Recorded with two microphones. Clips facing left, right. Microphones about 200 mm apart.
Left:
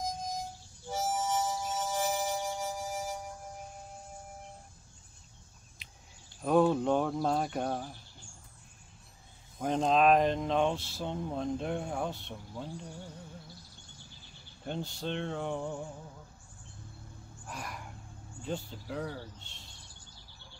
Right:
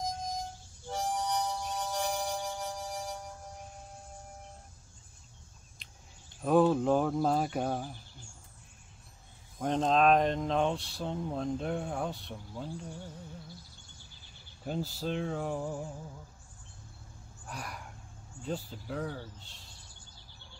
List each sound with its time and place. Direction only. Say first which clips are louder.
0.8 s harmonica: left 1 dB; 5° left (ahead or behind)
6.4 s speech: right 1 dB; centre (ahead or behind)
9.6 s speech: even; centre (ahead or behind)
14.6 s speech: right 2 dB; 5° right (ahead or behind)
17.5 s speech: even; centre (ahead or behind)